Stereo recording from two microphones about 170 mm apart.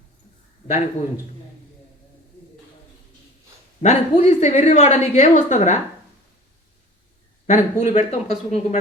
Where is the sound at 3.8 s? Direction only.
40° left (ahead or behind).